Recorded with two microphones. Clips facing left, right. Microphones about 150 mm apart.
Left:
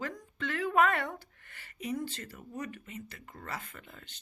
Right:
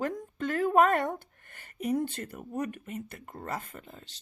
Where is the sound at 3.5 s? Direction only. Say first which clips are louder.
Right 5 dB; 45° right (ahead or behind).